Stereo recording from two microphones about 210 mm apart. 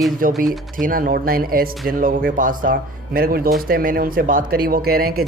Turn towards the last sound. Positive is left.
turn(degrees=-45)  # may be behind; listen again after turning